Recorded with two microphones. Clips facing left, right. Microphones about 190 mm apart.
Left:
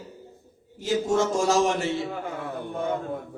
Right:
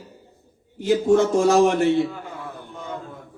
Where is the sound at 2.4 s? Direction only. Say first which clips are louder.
Left 6 dB; 55° left (ahead or behind).